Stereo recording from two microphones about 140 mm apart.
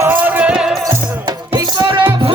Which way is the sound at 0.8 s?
25° right (ahead or behind).